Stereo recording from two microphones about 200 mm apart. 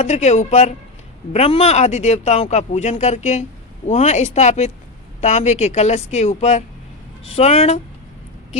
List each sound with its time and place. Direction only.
0.0 s speech: 35° left (ahead or behind)